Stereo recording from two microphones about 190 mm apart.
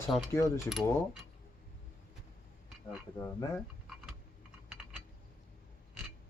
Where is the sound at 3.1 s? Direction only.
15° left (ahead or behind).